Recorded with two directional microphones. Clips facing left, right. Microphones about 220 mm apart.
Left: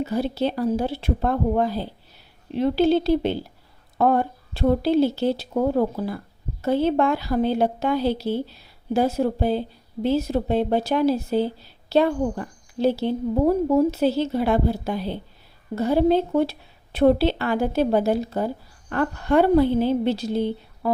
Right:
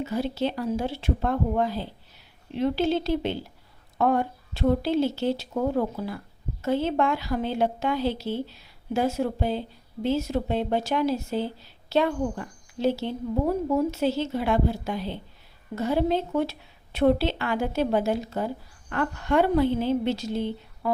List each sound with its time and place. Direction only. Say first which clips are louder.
0.0 s a woman's voice: left 3 dB; 35° left (ahead or behind)